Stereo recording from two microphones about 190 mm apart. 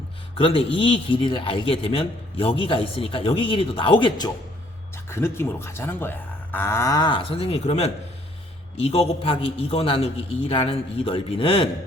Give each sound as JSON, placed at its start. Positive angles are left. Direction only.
{"t": 0.3, "sound": "a man's voice", "side_deg": 30}
{"t": 5.0, "sound": "a man's voice", "side_deg": 15}